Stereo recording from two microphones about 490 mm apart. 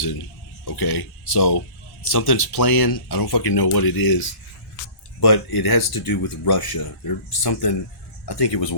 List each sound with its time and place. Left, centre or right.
0.6 s speech: left